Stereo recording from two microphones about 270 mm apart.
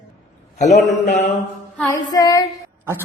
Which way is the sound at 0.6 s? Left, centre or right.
Left.